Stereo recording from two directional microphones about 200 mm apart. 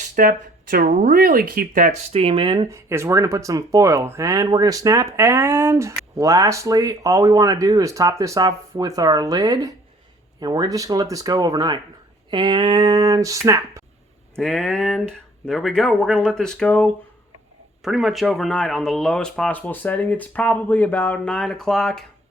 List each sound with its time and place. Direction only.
0.0 s speech: 45° right (ahead or behind)
2.1 s speech: 25° right (ahead or behind)
14.3 s speech: centre (ahead or behind)